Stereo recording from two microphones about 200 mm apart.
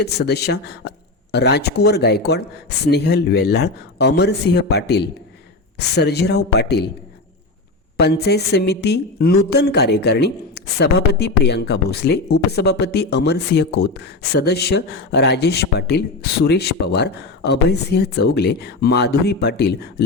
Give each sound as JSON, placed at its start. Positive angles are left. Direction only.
{"t": 0.0, "sound": "speech", "side_deg": 55}
{"t": 7.9, "sound": "speech", "side_deg": 55}